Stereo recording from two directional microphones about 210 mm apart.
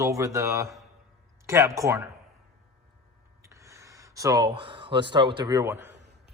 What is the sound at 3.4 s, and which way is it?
Speech, 15° right (ahead or behind).